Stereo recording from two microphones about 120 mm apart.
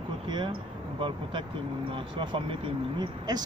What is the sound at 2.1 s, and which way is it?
Speech, 45° right (ahead or behind).